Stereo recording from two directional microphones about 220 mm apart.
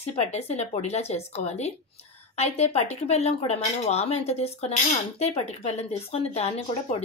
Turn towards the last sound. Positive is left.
turn(degrees=30)  # may be behind; listen again after turning